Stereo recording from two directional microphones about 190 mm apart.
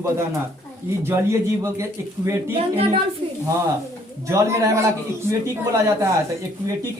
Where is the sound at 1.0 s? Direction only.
15° right (ahead or behind).